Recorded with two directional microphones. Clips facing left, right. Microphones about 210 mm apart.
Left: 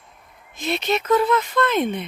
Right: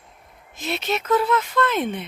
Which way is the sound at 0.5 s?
5° right (ahead or behind).